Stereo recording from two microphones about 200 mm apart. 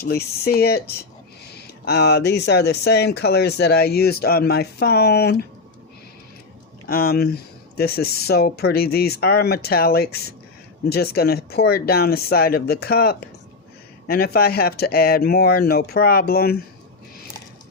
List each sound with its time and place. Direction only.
0.0 s speech: 50° left (ahead or behind)
6.8 s speech: 50° left (ahead or behind)